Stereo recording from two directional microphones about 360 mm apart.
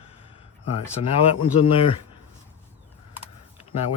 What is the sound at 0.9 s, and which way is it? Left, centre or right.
Speech, centre.